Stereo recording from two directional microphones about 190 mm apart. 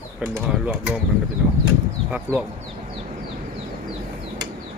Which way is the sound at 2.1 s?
10° right (ahead or behind).